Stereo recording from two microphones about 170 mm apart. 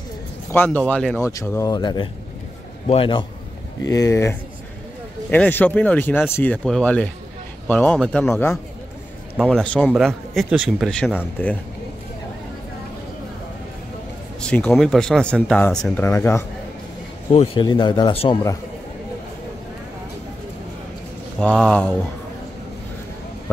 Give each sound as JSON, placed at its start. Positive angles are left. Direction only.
{"t": 0.5, "sound": "a man's voice", "side_deg": 10}
{"t": 3.8, "sound": "speech", "side_deg": 20}
{"t": 14.4, "sound": "speech", "side_deg": 5}
{"t": 17.6, "sound": "speech", "side_deg": 25}
{"t": 21.4, "sound": "speech", "side_deg": 5}